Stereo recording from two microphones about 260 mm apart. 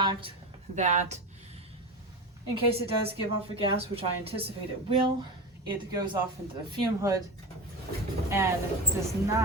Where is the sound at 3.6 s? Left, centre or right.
Right.